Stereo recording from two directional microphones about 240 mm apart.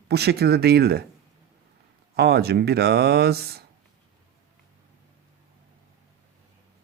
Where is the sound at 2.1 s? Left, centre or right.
Right.